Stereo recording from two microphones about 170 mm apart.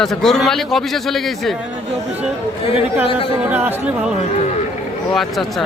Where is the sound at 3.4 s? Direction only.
10° right (ahead or behind).